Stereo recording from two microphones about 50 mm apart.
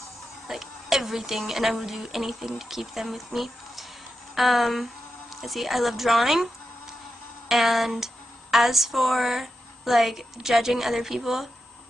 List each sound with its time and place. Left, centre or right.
0.5 s a woman's voice: centre